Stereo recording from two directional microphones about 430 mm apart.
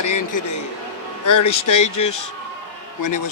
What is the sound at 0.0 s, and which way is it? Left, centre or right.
Speech, left.